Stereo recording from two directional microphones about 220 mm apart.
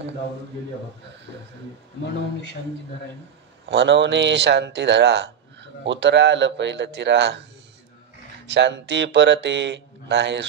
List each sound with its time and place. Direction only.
3.6 s speech: 50° right (ahead or behind)
8.5 s speech: 55° right (ahead or behind)